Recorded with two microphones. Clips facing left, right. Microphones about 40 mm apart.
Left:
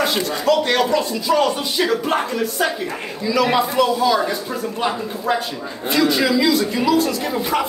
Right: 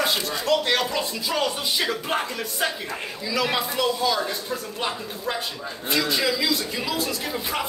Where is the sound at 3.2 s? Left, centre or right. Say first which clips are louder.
Left 8 dB; centre.